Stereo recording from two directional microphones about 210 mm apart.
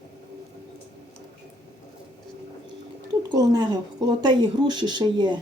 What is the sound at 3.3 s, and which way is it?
Speech, 20° right (ahead or behind).